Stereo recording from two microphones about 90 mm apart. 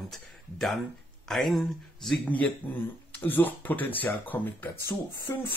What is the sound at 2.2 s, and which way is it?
Speech, 15° left (ahead or behind).